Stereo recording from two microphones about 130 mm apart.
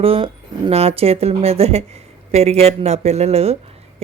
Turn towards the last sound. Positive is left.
turn(degrees=-55)  # may be behind; listen again after turning